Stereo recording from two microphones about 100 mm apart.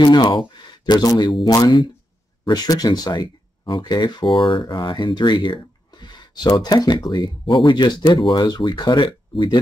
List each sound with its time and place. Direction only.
0.0 s speech: 45° left (ahead or behind)